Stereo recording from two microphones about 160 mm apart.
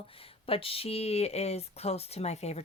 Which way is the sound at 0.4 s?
35° left (ahead or behind).